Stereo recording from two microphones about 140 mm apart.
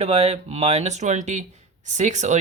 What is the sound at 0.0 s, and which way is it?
Speech, 50° right (ahead or behind).